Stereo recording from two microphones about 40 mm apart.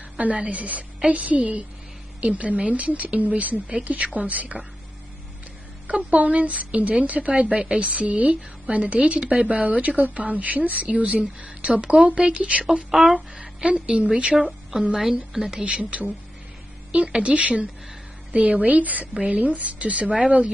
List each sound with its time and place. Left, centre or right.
0.2 s speech: right
5.9 s a woman's voice: right
11.8 s a woman's voice: right
13.1 s speech: centre
13.7 s a woman's voice: right
15.0 s a woman's voice: centre
15.6 s speech: right
20.1 s a woman's voice: centre